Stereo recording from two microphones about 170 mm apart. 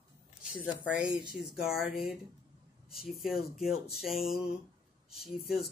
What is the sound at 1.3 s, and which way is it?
Speech, centre (ahead or behind).